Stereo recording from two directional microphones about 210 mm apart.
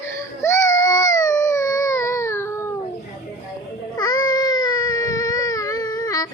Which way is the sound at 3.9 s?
20° left (ahead or behind).